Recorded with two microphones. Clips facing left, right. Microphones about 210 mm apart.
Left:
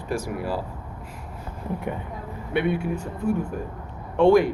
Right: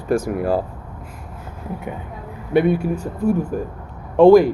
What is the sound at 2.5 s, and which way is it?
Speech, 40° right (ahead or behind).